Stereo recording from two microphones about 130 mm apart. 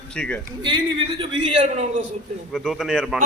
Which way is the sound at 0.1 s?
10° left (ahead or behind).